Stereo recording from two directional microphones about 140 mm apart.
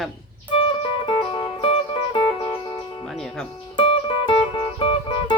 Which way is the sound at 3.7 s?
40° left (ahead or behind).